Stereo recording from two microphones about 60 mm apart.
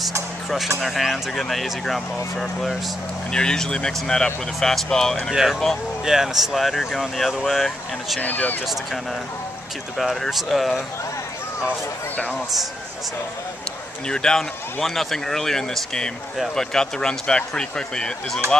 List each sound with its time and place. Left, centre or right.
0.7 s speech: centre
5.3 s speech: centre
8.2 s speech: left
9.9 s speech: centre
12.3 s speech: centre
14.0 s speech: centre